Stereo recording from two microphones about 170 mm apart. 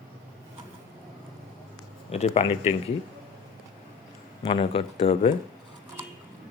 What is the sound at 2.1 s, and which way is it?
Speech, 40° left (ahead or behind).